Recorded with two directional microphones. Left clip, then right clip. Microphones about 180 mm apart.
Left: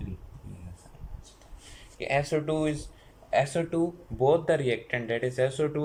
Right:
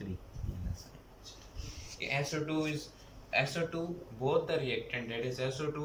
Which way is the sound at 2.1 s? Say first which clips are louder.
Left 8 dB; 40° left (ahead or behind).